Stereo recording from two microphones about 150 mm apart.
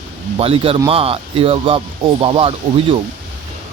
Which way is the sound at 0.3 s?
40° right (ahead or behind).